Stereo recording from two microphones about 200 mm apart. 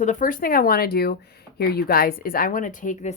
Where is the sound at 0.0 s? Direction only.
40° left (ahead or behind).